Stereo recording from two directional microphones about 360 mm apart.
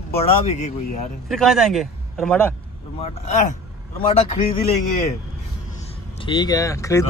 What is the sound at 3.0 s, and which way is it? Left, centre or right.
Speech, centre.